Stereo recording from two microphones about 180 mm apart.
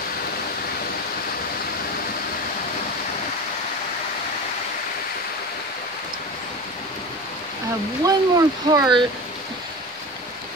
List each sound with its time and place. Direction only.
8.0 s speech: 20° right (ahead or behind)